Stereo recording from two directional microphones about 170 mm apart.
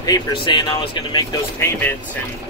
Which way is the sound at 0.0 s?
25° left (ahead or behind).